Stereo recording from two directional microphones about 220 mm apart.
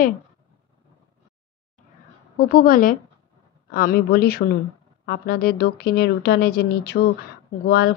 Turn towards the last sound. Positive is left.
turn(degrees=45)  # may be behind; listen again after turning